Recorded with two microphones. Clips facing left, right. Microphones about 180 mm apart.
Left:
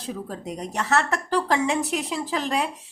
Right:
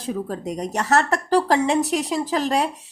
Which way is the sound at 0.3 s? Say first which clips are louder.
Right 5 dB; 40° right (ahead or behind).